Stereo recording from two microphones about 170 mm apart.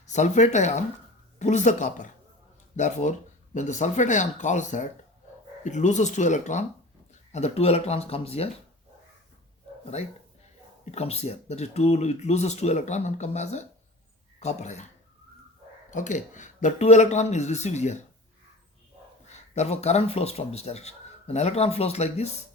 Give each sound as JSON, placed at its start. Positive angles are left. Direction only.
{"t": 0.1, "sound": "speech", "side_deg": 45}
{"t": 10.9, "sound": "speech", "side_deg": 40}
{"t": 15.9, "sound": "speech", "side_deg": 45}
{"t": 19.5, "sound": "speech", "side_deg": 40}